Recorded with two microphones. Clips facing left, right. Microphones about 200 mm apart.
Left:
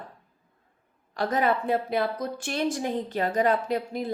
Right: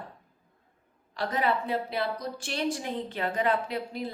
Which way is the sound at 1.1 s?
45° left (ahead or behind).